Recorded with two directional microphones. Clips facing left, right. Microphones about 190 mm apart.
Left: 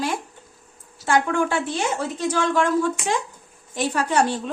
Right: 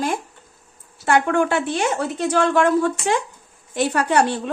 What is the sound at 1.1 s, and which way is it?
Speech, 60° right (ahead or behind).